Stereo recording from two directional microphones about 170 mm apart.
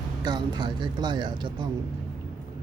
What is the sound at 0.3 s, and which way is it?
Speech, 25° right (ahead or behind).